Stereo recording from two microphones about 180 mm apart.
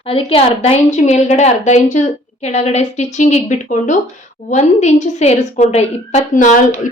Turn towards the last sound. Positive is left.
turn(degrees=45)  # may be behind; listen again after turning